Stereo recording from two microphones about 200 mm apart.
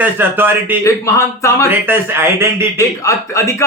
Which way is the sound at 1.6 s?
10° right (ahead or behind).